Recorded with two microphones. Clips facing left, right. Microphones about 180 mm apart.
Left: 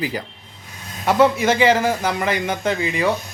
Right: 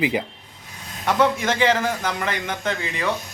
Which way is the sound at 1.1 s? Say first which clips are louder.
Left 4 dB; 5° left (ahead or behind).